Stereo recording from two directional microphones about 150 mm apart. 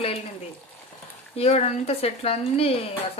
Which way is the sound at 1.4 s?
40° left (ahead or behind).